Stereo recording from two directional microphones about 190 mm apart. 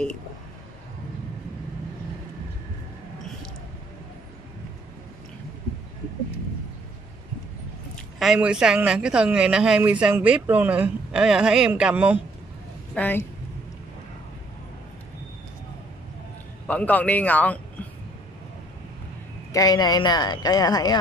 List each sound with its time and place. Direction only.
8.2 s speech: 5° right (ahead or behind)
12.9 s speech: 10° left (ahead or behind)
16.6 s a man's voice: 10° left (ahead or behind)
19.5 s speech: 20° left (ahead or behind)